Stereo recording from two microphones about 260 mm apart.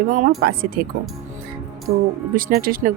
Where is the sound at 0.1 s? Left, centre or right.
Right.